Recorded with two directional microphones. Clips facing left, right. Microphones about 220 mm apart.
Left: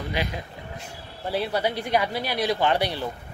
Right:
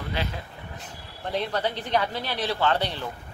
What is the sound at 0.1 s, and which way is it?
A woman's voice, 15° left (ahead or behind).